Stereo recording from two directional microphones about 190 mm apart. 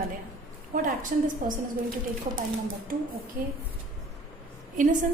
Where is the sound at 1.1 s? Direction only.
45° right (ahead or behind).